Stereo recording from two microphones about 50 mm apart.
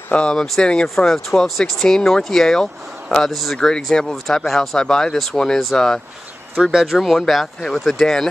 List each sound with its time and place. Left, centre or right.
0.1 s speech: centre
0.8 s speech: centre
3.3 s speech: centre
3.5 s speech: centre
6.6 s speech: centre